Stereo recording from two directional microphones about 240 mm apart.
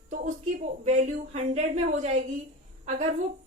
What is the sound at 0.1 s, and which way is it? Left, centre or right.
A woman's voice, right.